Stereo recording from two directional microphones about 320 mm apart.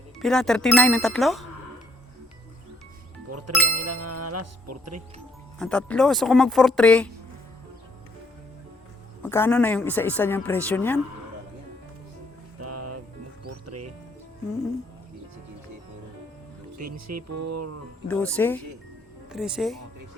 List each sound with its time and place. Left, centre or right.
0.2 s speech: centre
3.2 s speech: right
5.5 s speech: centre
9.2 s speech: centre
12.5 s music: right
16.8 s speech: right
18.1 s speech: centre